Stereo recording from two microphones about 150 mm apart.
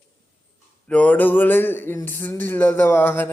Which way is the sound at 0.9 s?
10° left (ahead or behind).